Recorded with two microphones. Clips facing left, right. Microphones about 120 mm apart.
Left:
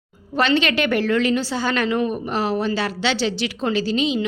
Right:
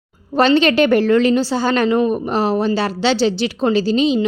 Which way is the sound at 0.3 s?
35° right (ahead or behind).